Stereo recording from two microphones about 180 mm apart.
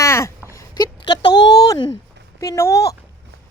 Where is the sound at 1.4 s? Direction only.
20° left (ahead or behind).